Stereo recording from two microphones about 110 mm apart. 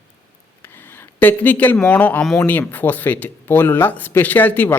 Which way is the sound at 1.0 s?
15° left (ahead or behind).